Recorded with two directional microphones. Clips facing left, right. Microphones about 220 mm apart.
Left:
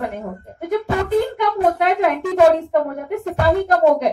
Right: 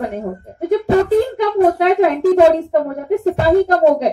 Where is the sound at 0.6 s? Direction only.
30° right (ahead or behind).